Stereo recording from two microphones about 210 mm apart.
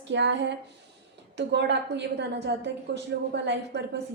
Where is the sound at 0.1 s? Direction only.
55° right (ahead or behind).